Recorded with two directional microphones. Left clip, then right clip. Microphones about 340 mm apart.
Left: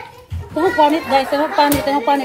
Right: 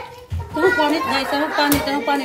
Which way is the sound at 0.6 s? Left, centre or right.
Centre.